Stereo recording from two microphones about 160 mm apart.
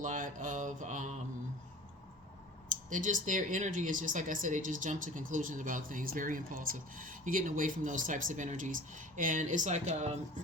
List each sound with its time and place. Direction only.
0.0 s mantra: 55° right (ahead or behind)
2.9 s speech: 55° right (ahead or behind)